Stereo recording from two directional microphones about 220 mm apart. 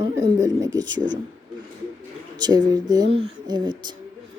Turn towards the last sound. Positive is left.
turn(degrees=-20)  # may be behind; listen again after turning